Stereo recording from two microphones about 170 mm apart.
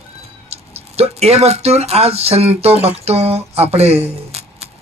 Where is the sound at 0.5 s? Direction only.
35° right (ahead or behind).